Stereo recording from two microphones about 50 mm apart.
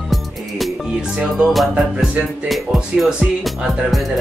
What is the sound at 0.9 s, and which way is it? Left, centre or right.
Music, centre.